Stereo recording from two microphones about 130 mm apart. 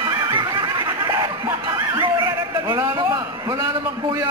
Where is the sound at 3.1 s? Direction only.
30° right (ahead or behind).